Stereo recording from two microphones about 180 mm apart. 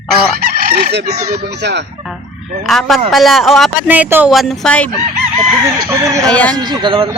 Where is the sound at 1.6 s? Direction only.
70° right (ahead or behind).